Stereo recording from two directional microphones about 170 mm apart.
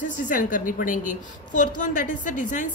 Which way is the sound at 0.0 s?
50° left (ahead or behind).